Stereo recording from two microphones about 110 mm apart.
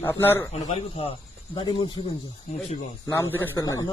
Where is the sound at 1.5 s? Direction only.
45° left (ahead or behind).